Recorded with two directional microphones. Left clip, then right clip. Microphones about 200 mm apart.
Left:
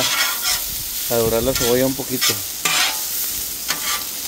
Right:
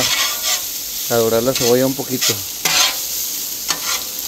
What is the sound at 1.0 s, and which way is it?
Speech, 20° right (ahead or behind).